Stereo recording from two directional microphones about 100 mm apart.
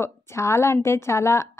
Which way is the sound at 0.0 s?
25° left (ahead or behind).